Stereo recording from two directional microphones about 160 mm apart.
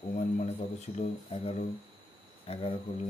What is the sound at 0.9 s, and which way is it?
Speech, 40° left (ahead or behind).